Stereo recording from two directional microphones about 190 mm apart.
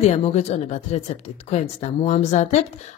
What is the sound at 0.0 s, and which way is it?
A woman's voice, 35° left (ahead or behind).